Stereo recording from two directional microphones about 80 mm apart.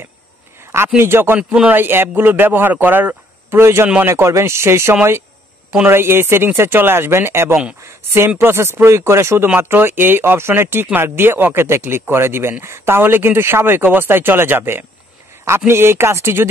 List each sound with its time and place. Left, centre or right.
0.9 s speech: right
1.5 s a man's voice: centre
1.8 s speech: right